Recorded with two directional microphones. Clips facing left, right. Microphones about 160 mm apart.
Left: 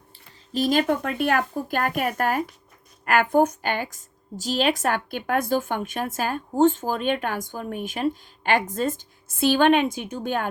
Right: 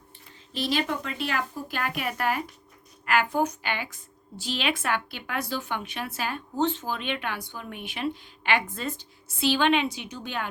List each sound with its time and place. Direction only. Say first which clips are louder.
0.5 s a woman's voice: left 6 dB; 45° left (ahead or behind)